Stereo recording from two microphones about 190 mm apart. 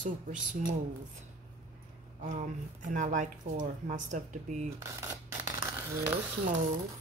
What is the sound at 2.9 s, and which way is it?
Speech, 40° right (ahead or behind).